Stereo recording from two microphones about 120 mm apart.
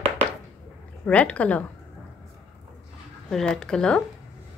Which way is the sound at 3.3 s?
5° left (ahead or behind).